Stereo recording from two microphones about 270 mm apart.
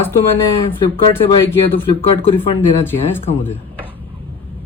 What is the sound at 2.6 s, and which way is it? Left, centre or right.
Speech, centre.